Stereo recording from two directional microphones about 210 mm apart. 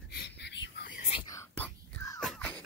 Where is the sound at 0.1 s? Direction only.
55° left (ahead or behind).